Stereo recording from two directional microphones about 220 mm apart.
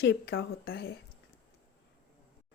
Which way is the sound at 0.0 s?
45° left (ahead or behind).